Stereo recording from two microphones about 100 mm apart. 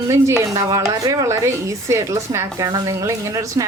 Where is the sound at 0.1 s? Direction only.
30° right (ahead or behind).